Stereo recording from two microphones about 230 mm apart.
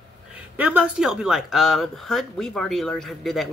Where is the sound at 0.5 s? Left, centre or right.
Centre.